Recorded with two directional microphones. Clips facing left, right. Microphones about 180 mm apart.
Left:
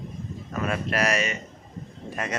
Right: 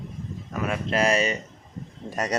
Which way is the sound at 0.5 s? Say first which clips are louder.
Even; 10° right (ahead or behind).